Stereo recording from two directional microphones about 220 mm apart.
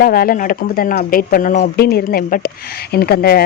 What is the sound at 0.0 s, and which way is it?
A woman's voice, 40° left (ahead or behind).